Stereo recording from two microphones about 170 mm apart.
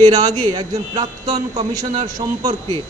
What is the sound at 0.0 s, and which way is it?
A man's voice, 20° right (ahead or behind).